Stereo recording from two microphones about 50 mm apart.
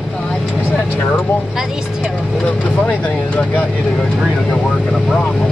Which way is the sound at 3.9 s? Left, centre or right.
Centre.